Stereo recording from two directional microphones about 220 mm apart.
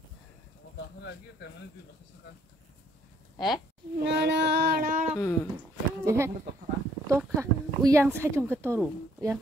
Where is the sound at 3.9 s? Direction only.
50° right (ahead or behind).